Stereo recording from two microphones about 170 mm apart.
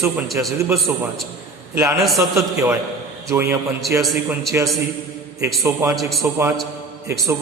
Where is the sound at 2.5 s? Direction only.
15° right (ahead or behind).